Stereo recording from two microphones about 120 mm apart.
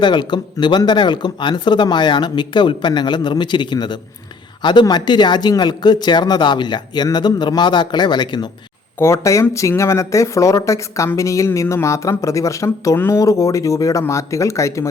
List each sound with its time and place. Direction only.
0.0 s speech: 40° left (ahead or behind)
9.0 s speech: 25° left (ahead or behind)